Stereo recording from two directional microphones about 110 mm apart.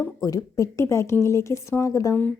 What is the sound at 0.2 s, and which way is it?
Speech, 30° left (ahead or behind).